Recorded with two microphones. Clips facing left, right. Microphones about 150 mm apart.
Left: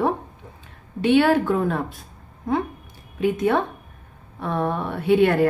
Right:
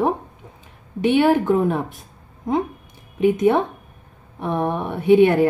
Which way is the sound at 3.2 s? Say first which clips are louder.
Right 4 dB; 15° right (ahead or behind).